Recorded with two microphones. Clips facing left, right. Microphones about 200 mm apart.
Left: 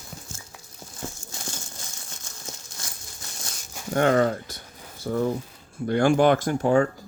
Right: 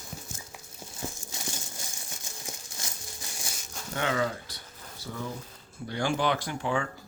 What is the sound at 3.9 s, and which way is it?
Speech, 50° left (ahead or behind).